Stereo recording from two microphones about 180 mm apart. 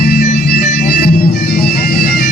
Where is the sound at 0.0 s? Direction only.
55° left (ahead or behind).